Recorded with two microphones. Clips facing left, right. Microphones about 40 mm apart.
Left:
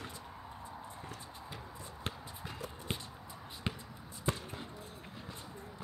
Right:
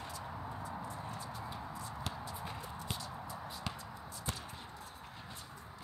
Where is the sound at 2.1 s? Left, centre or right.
Left.